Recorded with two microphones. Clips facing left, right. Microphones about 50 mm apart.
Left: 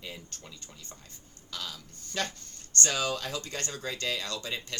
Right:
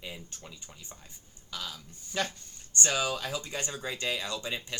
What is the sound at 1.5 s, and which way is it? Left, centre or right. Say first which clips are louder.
Speech: even; centre.